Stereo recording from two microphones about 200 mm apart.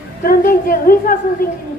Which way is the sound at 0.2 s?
45° left (ahead or behind).